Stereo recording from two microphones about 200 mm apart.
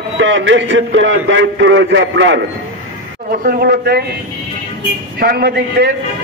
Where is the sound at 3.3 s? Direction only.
50° right (ahead or behind).